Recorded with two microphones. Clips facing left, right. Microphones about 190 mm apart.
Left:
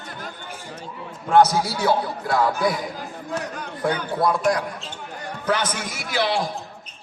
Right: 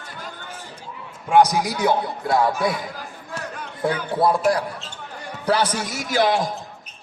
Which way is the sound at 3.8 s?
30° right (ahead or behind).